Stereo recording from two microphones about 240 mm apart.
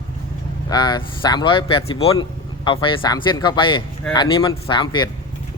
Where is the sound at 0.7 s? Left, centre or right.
Centre.